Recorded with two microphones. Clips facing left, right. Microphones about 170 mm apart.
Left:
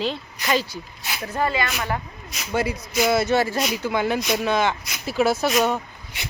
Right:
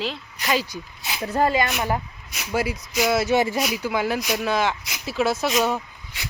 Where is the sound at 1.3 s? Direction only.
40° right (ahead or behind).